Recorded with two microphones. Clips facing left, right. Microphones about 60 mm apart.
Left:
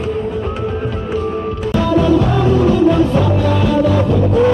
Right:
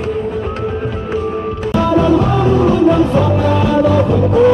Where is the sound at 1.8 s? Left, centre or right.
Right.